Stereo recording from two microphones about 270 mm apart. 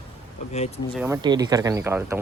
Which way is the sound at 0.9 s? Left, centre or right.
Centre.